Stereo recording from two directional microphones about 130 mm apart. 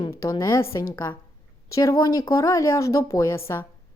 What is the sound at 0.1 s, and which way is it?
A woman's voice, 25° left (ahead or behind).